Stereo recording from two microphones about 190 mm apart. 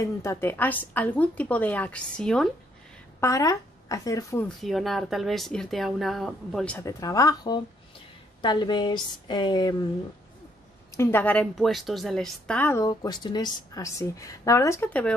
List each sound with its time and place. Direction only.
0.0 s a woman's voice: 15° left (ahead or behind)
3.2 s a woman's voice: 15° left (ahead or behind)
4.6 s speech: centre (ahead or behind); by 9.8 s 20° left (ahead or behind)
11.0 s a woman's voice: 10° left (ahead or behind)